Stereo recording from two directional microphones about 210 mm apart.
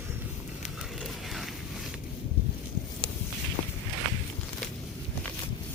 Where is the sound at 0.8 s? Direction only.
Centre (ahead or behind).